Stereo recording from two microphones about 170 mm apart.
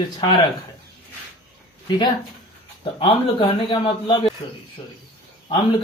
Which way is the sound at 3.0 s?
30° left (ahead or behind).